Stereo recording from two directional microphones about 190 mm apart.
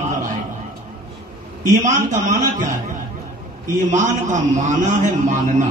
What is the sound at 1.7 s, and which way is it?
Speech, 40° right (ahead or behind).